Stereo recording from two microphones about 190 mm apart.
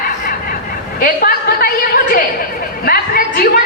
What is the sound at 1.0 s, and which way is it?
Speech, 50° left (ahead or behind).